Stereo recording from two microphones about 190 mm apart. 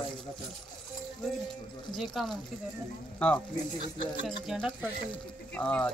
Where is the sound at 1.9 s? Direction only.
Centre (ahead or behind).